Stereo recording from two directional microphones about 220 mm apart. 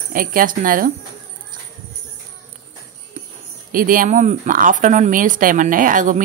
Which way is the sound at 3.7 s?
40° right (ahead or behind).